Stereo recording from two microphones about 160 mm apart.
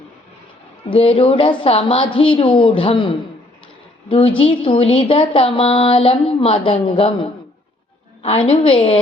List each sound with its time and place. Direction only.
0.9 s a woman's voice: 35° left (ahead or behind)